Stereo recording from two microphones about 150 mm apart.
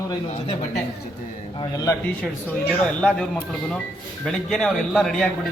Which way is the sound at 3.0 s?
5° left (ahead or behind).